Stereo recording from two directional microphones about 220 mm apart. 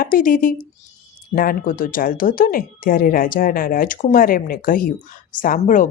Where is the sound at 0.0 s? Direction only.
40° left (ahead or behind).